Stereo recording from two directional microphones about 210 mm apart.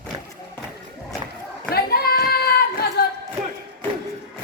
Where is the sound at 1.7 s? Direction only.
45° left (ahead or behind).